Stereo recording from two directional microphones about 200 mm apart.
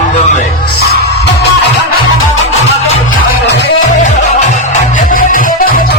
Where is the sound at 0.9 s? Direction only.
55° left (ahead or behind).